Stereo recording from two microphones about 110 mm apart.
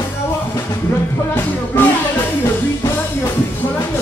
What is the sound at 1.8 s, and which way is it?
Speech, 15° left (ahead or behind).